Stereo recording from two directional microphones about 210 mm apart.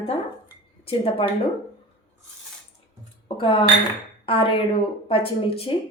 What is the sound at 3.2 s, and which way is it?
A woman's voice, 25° left (ahead or behind).